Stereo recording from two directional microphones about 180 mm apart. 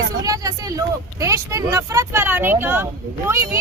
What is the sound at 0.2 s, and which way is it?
Speech, 20° right (ahead or behind).